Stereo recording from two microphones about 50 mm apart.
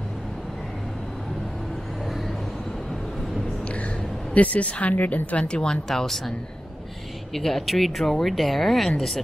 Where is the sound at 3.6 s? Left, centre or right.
Left.